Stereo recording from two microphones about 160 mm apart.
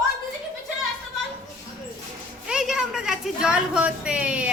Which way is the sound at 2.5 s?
5° right (ahead or behind).